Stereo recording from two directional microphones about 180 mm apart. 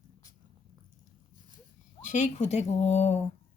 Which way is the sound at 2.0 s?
40° left (ahead or behind).